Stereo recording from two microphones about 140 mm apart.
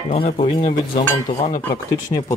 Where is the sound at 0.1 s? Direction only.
45° left (ahead or behind).